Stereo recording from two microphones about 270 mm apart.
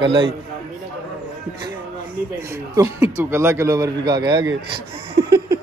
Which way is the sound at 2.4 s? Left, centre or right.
Centre.